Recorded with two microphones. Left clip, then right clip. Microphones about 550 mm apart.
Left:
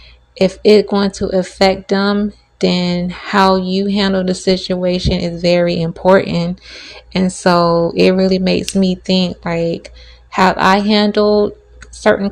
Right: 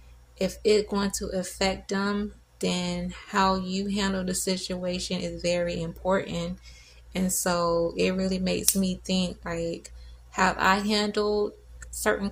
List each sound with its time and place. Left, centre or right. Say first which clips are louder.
0.3 s speech: left 13 dB; right